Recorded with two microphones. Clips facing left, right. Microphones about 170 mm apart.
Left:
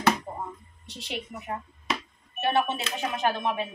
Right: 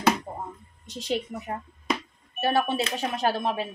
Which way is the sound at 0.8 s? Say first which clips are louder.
Right 7 dB; 45° right (ahead or behind).